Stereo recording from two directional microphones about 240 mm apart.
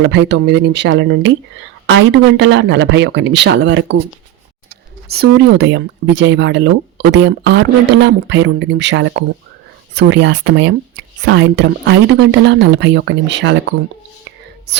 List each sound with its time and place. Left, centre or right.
0.0 s speech: right
5.0 s speech: right